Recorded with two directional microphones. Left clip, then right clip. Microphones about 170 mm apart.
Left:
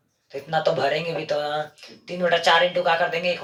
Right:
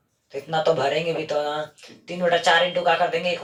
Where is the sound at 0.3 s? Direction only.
30° left (ahead or behind).